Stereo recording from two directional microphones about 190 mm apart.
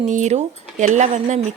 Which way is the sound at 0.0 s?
40° right (ahead or behind).